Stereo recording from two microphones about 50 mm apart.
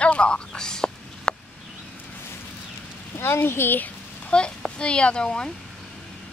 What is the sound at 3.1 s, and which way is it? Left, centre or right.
Speech, left.